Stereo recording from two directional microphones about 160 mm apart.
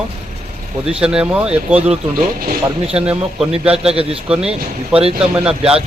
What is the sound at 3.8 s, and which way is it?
Speech, 40° right (ahead or behind).